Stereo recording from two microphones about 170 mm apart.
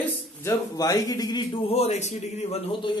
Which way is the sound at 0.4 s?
15° left (ahead or behind).